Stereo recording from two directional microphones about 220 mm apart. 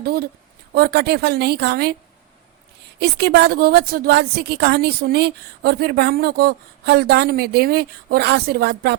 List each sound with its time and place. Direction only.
0.0 s a woman's voice: 45° right (ahead or behind)
3.0 s a woman's voice: 50° right (ahead or behind)